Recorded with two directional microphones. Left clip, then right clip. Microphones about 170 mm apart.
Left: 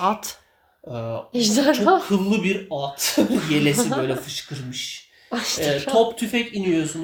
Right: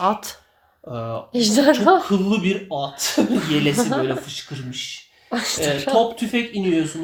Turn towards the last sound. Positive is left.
turn(degrees=25)  # may be behind; listen again after turning